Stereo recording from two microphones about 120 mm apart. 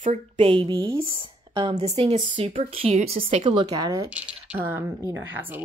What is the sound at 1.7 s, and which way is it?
Speech, 65° right (ahead or behind).